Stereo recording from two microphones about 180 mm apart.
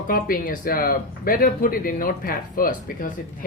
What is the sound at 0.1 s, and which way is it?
Speech, 50° left (ahead or behind).